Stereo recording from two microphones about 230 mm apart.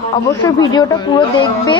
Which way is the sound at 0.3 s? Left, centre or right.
Centre.